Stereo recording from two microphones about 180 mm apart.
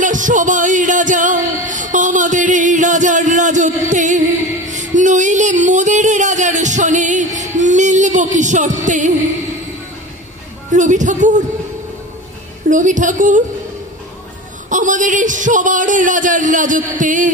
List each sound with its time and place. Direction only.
0.0 s music: 45° right (ahead or behind)
10.7 s speech: 45° right (ahead or behind)
12.6 s speech: 45° right (ahead or behind)
14.7 s speech: 45° right (ahead or behind)